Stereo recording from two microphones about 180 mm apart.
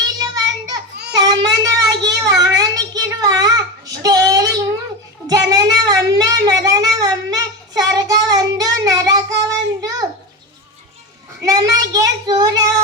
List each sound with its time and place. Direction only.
0.2 s child singing: 20° right (ahead or behind)
5.3 s a sound: 20° right (ahead or behind)
11.4 s speech: 20° right (ahead or behind)